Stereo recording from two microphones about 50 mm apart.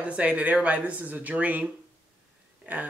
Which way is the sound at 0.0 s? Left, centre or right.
Right.